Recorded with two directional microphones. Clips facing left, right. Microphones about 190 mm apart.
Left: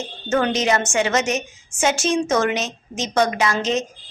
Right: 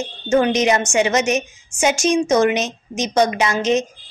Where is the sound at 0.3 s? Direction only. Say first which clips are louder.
Right 4 dB; 15° right (ahead or behind).